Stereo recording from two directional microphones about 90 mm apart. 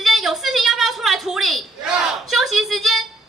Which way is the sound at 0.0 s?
5° right (ahead or behind).